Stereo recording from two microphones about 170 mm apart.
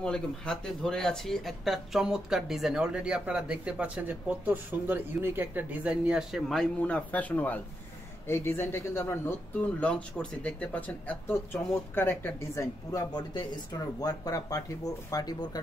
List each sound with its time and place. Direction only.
0.0 s speech: 5° left (ahead or behind); by 15.6 s 25° left (ahead or behind)